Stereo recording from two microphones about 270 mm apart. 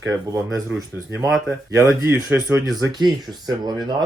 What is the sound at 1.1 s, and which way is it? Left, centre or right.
Speech, centre.